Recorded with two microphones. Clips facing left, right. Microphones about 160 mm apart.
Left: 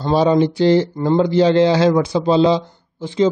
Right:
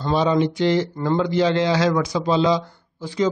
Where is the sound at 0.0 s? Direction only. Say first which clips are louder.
Left 4 dB; 35° left (ahead or behind).